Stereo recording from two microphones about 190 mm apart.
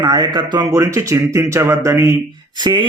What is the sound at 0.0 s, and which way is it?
A man's voice, 20° right (ahead or behind).